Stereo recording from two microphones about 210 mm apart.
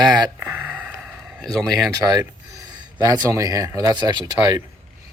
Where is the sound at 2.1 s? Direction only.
15° right (ahead or behind).